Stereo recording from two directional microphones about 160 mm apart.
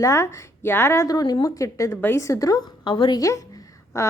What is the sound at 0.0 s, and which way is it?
A woman's voice, 20° left (ahead or behind).